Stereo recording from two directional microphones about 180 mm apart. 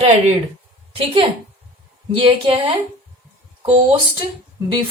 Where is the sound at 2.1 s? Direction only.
30° right (ahead or behind).